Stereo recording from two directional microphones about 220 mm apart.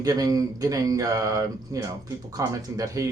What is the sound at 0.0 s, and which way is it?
Speech, 15° right (ahead or behind).